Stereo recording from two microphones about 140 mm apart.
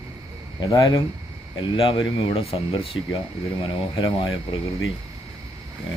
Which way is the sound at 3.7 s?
35° left (ahead or behind).